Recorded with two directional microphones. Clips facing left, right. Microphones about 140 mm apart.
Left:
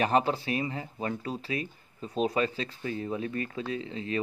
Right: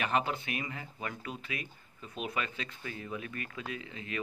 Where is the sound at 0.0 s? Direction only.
35° left (ahead or behind).